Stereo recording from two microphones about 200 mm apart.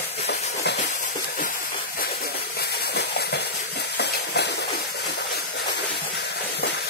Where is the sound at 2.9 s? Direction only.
55° left (ahead or behind).